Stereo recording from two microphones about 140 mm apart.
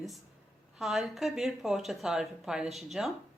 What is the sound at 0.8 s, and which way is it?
Speech, 5° right (ahead or behind).